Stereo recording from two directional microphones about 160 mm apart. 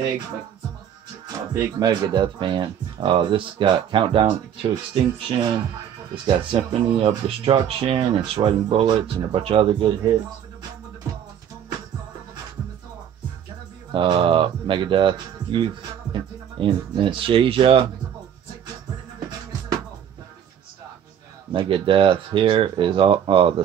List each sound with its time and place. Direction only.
1.2 s speech: 25° right (ahead or behind)
13.9 s speech: 30° right (ahead or behind)
21.5 s speech: 30° right (ahead or behind)